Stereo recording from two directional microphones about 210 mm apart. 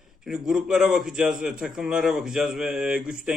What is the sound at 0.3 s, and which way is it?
A man's voice, 5° right (ahead or behind).